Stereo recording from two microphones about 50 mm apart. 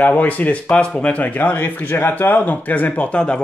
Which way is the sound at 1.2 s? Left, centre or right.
Left.